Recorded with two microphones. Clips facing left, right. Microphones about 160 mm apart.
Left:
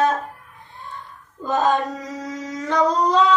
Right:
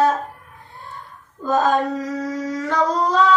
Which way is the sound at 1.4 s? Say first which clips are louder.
Right 2 dB; 20° left (ahead or behind).